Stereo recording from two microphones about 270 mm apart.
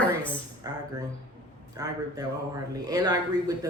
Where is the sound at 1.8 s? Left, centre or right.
Centre.